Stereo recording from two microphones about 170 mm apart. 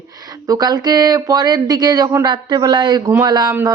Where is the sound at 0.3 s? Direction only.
20° right (ahead or behind).